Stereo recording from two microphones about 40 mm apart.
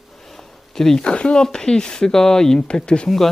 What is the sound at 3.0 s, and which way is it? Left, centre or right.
Speech, centre.